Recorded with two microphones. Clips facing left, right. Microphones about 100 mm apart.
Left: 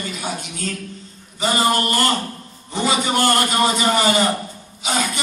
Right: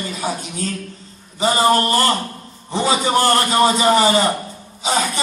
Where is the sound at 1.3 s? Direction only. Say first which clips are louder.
Right 4 dB; 35° right (ahead or behind).